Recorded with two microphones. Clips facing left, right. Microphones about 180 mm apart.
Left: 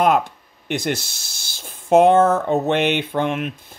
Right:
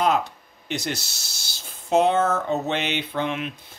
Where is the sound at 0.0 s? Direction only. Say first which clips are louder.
Left 5 dB; 55° left (ahead or behind).